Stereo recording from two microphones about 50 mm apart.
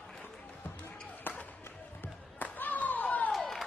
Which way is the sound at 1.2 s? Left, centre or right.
Left.